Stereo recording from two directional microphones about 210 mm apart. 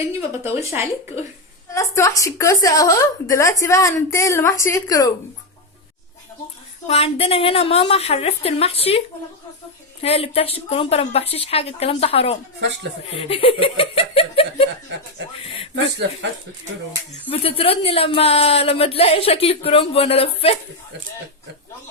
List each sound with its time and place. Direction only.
0.4 s speech: 10° right (ahead or behind)
1.7 s a woman's voice: 15° left (ahead or behind)
6.8 s speech: 30° left (ahead or behind)
17.2 s speech: 25° left (ahead or behind)